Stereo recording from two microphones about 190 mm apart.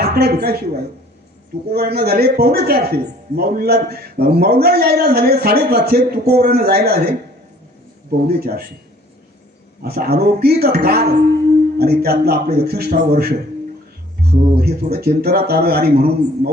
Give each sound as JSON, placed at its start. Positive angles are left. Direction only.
{"t": 0.0, "sound": "a woman's voice", "side_deg": -55}
{"t": 1.7, "sound": "a man's voice", "side_deg": -55}
{"t": 8.3, "sound": "a man's voice", "side_deg": -55}
{"t": 9.8, "sound": "a man's voice", "side_deg": -55}